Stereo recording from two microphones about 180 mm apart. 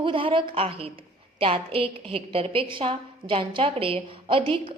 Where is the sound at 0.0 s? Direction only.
30° right (ahead or behind).